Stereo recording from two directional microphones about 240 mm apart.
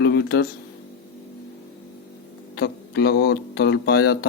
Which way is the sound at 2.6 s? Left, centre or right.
Left.